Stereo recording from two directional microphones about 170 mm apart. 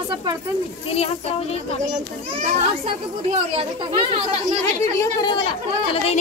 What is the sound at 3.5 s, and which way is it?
Speech, 30° right (ahead or behind).